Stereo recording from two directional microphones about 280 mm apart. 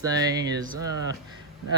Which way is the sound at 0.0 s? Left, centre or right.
Centre.